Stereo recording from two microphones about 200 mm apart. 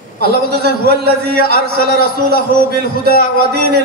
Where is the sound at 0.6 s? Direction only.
55° right (ahead or behind).